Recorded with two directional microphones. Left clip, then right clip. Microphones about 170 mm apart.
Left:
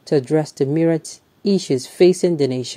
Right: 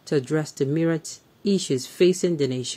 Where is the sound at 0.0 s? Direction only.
10° left (ahead or behind).